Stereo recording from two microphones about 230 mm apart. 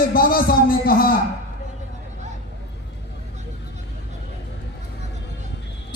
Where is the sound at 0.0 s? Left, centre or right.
Left.